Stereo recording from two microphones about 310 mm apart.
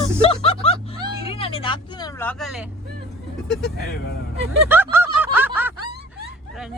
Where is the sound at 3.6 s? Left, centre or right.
Left.